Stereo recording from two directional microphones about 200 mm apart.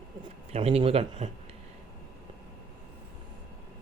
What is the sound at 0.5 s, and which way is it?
Speech, 30° right (ahead or behind).